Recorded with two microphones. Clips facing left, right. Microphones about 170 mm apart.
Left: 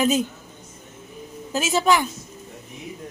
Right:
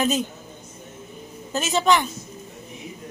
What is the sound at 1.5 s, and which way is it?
Speech, 5° left (ahead or behind).